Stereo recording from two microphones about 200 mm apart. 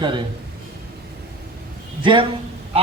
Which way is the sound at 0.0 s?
25° right (ahead or behind).